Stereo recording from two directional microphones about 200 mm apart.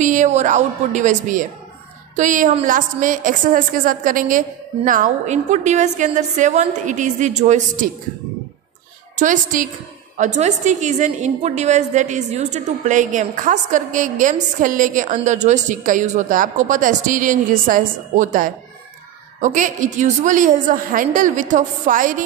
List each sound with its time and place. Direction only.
0.0 s a woman's voice: 40° right (ahead or behind)
9.1 s a woman's voice: 40° right (ahead or behind)